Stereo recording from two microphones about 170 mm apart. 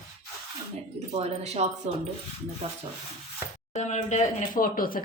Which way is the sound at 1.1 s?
40° right (ahead or behind).